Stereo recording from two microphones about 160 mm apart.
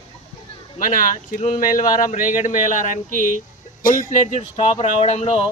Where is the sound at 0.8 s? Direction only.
55° left (ahead or behind).